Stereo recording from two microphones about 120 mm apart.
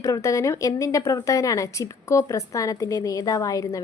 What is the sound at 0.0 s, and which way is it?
A woman's voice, 25° left (ahead or behind).